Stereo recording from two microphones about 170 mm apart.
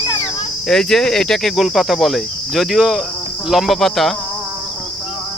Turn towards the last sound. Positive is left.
turn(degrees=0)  # may be behind; listen again after turning